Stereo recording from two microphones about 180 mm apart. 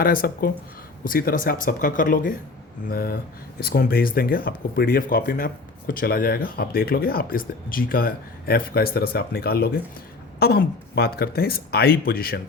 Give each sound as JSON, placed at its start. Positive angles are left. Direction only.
{"t": 0.0, "sound": "speech", "side_deg": 55}